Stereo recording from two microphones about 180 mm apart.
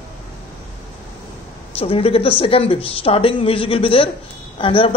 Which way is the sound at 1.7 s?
35° left (ahead or behind).